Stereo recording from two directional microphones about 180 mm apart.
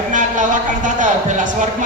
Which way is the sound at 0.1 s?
45° right (ahead or behind).